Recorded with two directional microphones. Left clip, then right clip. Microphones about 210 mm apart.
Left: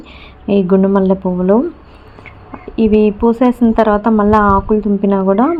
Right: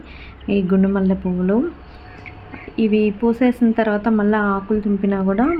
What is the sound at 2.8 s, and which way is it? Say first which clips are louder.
Speech: left 7 dB; 15° left (ahead or behind).